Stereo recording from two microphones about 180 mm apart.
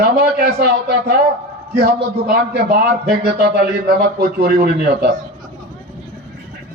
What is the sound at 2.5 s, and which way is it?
A man's voice, 60° right (ahead or behind).